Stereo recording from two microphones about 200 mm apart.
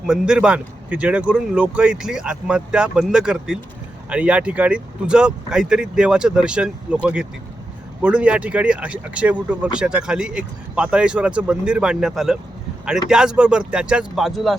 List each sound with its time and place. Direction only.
0.0 s speech: 5° right (ahead or behind)